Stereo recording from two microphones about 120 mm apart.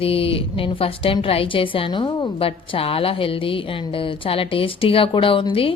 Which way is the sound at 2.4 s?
50° left (ahead or behind).